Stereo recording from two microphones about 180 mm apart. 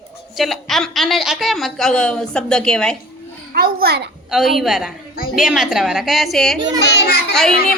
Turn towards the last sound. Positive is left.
turn(degrees=0)  # may be behind; listen again after turning